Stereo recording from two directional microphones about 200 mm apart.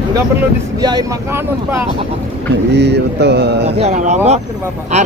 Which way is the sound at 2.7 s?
55° right (ahead or behind).